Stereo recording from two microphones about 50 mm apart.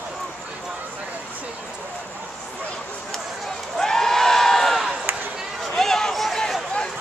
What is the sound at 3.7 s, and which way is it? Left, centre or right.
Crowd, centre.